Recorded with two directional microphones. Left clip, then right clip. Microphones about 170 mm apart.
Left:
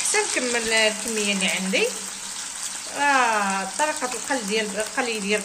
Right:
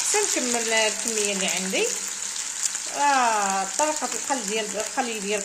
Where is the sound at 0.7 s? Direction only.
45° right (ahead or behind).